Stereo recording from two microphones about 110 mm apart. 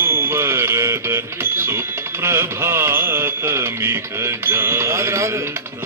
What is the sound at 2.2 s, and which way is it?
Mantra, 25° right (ahead or behind).